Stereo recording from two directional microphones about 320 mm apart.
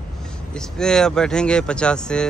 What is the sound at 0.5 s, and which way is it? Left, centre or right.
A man's voice, centre.